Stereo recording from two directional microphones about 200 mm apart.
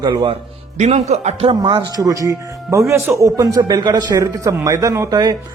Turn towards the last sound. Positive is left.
turn(degrees=-20)  # may be behind; listen again after turning